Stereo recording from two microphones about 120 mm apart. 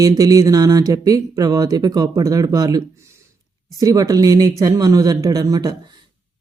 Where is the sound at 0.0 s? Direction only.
30° right (ahead or behind).